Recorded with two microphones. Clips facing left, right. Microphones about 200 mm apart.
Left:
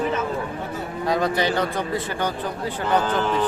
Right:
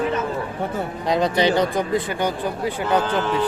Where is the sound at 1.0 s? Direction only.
20° right (ahead or behind).